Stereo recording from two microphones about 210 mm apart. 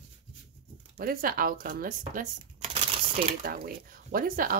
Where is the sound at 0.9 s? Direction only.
45° right (ahead or behind).